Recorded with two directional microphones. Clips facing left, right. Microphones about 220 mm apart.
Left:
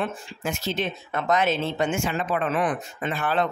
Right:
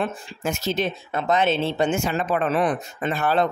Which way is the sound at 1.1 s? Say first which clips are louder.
Right 2 dB; 30° right (ahead or behind).